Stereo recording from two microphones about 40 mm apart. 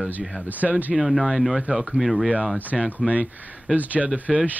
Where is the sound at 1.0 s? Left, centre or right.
Centre.